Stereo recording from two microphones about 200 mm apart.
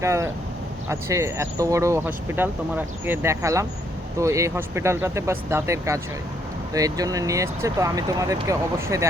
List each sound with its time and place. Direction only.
0.0 s speech: 15° right (ahead or behind)